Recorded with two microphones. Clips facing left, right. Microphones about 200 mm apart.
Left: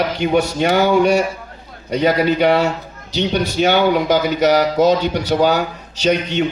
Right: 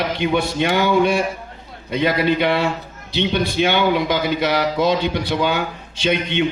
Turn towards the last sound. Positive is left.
turn(degrees=40)  # may be behind; listen again after turning